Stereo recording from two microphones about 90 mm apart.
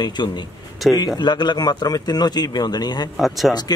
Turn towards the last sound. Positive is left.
turn(degrees=50)  # may be behind; listen again after turning